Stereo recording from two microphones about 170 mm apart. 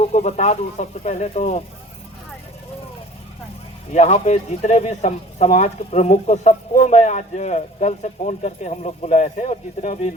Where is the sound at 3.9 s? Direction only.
45° left (ahead or behind).